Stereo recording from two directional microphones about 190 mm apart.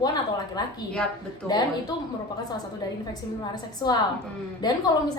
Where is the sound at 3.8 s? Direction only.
20° left (ahead or behind).